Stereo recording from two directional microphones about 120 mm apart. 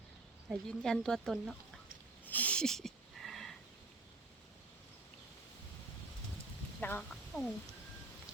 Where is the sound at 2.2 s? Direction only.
15° left (ahead or behind).